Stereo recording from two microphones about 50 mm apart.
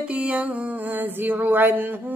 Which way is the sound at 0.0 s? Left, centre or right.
Right.